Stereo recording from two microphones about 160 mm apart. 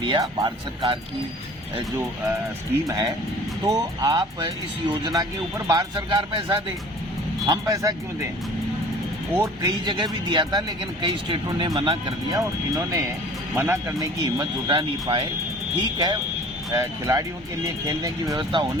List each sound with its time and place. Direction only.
0.0 s speech: 30° right (ahead or behind)
2.8 s speech: 20° right (ahead or behind)
9.4 s speech: 25° right (ahead or behind)
15.8 s speech: 25° right (ahead or behind)